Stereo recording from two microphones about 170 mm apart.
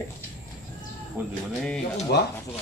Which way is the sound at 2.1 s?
70° left (ahead or behind).